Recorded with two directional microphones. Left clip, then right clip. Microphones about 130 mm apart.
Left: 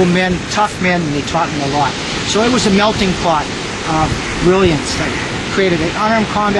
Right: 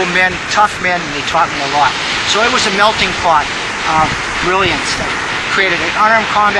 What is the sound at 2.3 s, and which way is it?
Speech, 20° right (ahead or behind).